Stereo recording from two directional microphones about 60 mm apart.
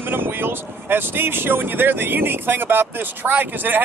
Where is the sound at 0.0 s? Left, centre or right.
Right.